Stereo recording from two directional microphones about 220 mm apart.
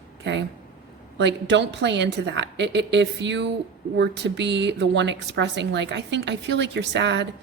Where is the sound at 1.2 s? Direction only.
50° right (ahead or behind).